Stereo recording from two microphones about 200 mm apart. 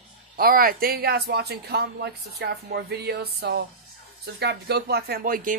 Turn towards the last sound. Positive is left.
turn(degrees=-45)  # may be behind; listen again after turning